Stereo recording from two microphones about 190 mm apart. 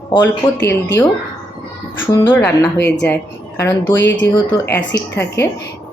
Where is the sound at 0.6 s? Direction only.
65° left (ahead or behind).